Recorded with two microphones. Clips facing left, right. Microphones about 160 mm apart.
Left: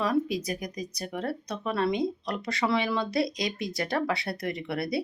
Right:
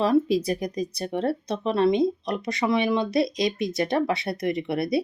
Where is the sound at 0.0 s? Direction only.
30° right (ahead or behind).